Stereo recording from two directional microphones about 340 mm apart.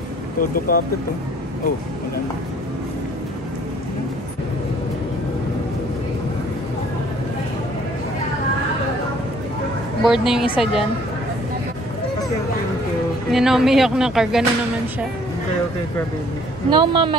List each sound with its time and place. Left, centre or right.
0.4 s speech: left
10.0 s speech: centre
13.3 s speech: centre
16.7 s speech: centre